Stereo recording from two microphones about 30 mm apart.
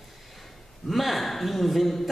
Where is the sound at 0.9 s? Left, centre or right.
Centre.